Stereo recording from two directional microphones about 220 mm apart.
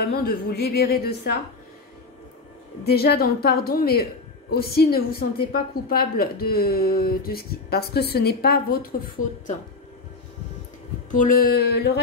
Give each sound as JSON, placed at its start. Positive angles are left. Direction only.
{"t": 0.0, "sound": "a woman's voice", "side_deg": 45}
{"t": 2.8, "sound": "a woman's voice", "side_deg": 45}
{"t": 11.1, "sound": "a woman's voice", "side_deg": 35}